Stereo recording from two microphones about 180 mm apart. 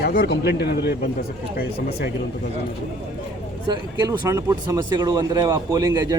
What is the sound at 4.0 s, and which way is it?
Speech, 20° right (ahead or behind).